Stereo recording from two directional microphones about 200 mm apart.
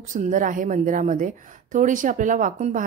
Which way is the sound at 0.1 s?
40° right (ahead or behind).